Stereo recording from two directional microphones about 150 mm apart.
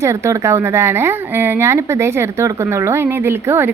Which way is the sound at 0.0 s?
20° right (ahead or behind).